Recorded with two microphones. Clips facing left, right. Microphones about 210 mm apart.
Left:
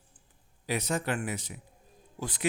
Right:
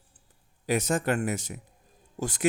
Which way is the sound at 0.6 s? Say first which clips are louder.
Right 5 dB; 45° right (ahead or behind).